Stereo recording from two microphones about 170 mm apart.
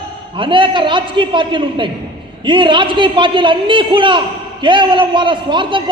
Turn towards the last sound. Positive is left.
turn(degrees=-30)  # may be behind; listen again after turning